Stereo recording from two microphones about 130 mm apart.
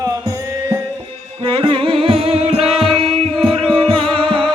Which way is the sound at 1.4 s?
45° right (ahead or behind).